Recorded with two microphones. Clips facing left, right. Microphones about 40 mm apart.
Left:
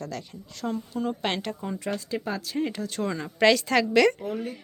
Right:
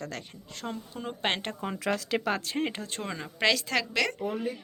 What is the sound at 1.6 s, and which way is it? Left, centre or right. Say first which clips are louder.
Speech: right 1 dB; right.